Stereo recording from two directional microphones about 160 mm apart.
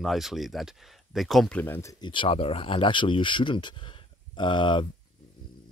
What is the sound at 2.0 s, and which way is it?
Speech, 30° left (ahead or behind).